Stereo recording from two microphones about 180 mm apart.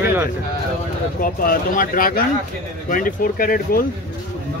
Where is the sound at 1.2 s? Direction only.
55° left (ahead or behind).